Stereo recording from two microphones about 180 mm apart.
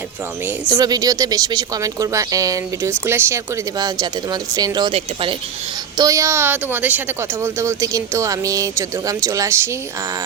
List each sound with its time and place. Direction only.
0.7 s speech: 20° right (ahead or behind)
6.0 s speech: 15° right (ahead or behind)